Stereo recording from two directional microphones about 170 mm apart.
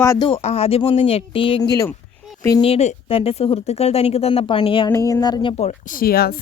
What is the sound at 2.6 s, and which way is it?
Speech, 35° left (ahead or behind).